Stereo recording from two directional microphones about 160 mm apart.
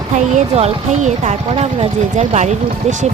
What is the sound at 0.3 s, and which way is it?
Speech, 40° right (ahead or behind).